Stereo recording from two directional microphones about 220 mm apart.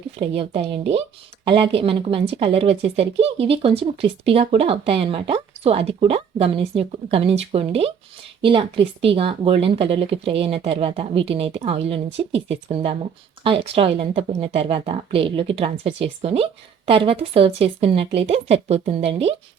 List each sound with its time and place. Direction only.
0.2 s speech: 25° right (ahead or behind)